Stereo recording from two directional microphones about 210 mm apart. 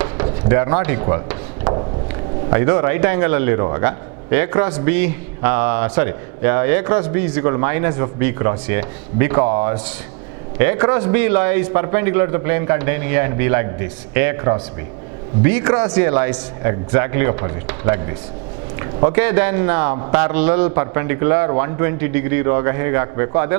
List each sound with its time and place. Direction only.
0.3 s a man's voice: 15° right (ahead or behind)